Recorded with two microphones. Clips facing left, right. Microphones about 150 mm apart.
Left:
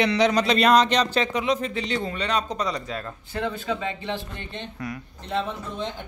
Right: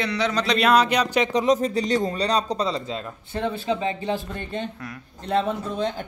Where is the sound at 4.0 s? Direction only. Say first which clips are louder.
Right 4 dB; 45° right (ahead or behind).